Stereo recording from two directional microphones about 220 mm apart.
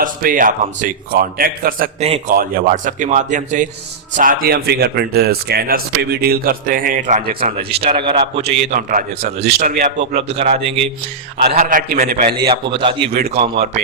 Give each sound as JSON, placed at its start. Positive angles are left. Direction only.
{"t": 0.0, "sound": "a man's voice", "side_deg": -40}
{"t": 2.0, "sound": "a man's voice", "side_deg": -25}
{"t": 2.3, "sound": "a man's voice", "side_deg": -40}
{"t": 11.6, "sound": "a man's voice", "side_deg": -40}
{"t": 12.4, "sound": "a man's voice", "side_deg": -20}
{"t": 13.1, "sound": "speech", "side_deg": -45}